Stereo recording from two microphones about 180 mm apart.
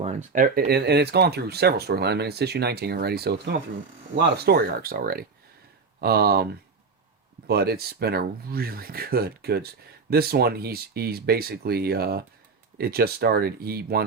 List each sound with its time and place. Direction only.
0.0 s speech: 40° right (ahead or behind); by 6.4 s 60° right (ahead or behind)
7.4 s speech: 60° right (ahead or behind)